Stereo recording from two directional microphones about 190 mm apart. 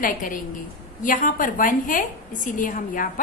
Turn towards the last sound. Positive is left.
turn(degrees=45)  # may be behind; listen again after turning